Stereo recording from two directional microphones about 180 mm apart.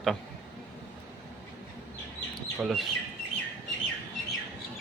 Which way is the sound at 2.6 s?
Centre (ahead or behind).